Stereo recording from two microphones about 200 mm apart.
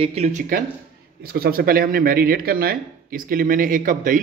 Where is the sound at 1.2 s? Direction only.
50° right (ahead or behind).